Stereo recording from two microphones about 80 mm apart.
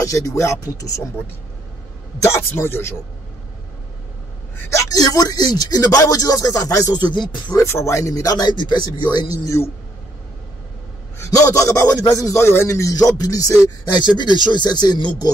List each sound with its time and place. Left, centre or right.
0.0 s speech: left
2.2 s a man's voice: left
4.6 s a man's voice: left
5.0 s speech: left
7.1 s speech: left
7.5 s speech: left
11.1 s a sound: left
11.5 s speech: left
12.4 s a man's voice: left
12.9 s speech: left
13.9 s speech: left